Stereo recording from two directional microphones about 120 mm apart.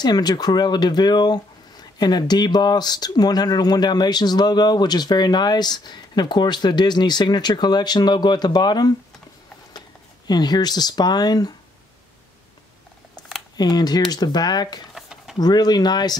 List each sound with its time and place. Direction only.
0.0 s speech: 35° left (ahead or behind)
13.6 s speech: 35° left (ahead or behind)
15.0 s a sound: 5° right (ahead or behind)
15.3 s speech: 35° left (ahead or behind)